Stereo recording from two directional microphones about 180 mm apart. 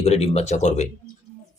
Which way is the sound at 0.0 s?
35° left (ahead or behind).